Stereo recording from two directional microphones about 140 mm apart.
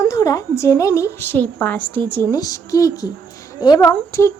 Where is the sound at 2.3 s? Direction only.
25° left (ahead or behind).